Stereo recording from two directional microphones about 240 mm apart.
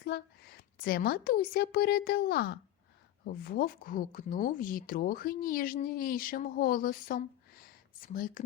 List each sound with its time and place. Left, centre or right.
0.0 s speech: left